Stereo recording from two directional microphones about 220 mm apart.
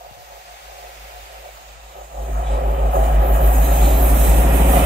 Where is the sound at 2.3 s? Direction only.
45° right (ahead or behind).